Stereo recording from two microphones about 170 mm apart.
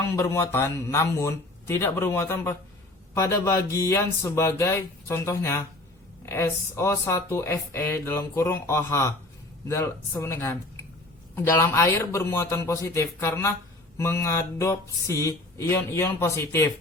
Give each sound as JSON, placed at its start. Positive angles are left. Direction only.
{"t": 0.0, "sound": "speech", "side_deg": 15}